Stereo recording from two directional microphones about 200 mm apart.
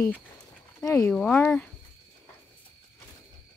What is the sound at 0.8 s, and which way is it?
Speech, 15° left (ahead or behind).